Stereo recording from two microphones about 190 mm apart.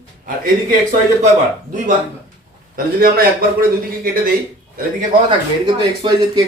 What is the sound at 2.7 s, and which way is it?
Speech, 50° right (ahead or behind).